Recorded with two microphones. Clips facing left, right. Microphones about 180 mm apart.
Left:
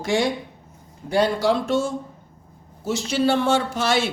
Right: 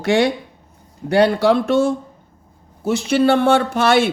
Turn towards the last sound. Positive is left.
turn(degrees=-60)  # may be behind; listen again after turning